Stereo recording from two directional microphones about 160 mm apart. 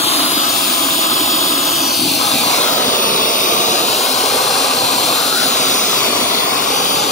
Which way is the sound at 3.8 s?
Centre (ahead or behind).